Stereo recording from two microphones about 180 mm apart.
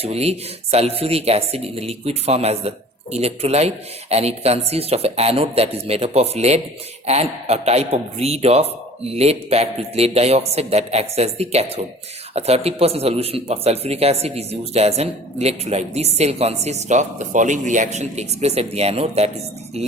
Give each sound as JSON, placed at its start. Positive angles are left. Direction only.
{"t": 0.0, "sound": "speech", "side_deg": -35}